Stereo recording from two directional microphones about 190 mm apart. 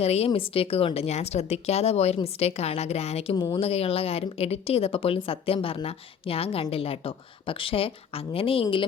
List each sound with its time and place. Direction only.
0.0 s a woman's voice: 35° left (ahead or behind)